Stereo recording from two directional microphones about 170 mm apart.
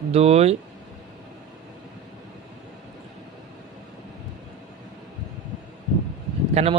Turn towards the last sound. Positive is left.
turn(degrees=-40)  # may be behind; listen again after turning